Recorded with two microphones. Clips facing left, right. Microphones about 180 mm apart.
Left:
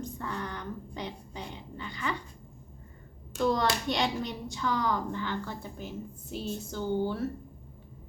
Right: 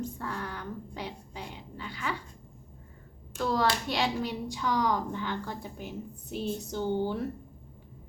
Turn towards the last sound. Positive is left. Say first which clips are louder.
# right 1 dB
turn(degrees=-15)  # may be behind; listen again after turning